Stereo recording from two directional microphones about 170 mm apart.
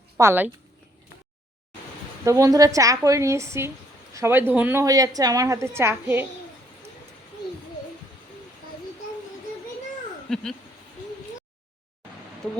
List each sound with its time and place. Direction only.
0.2 s a woman's voice: 10° right (ahead or behind)
2.2 s a woman's voice: 20° right (ahead or behind)
10.2 s speech: 5° left (ahead or behind)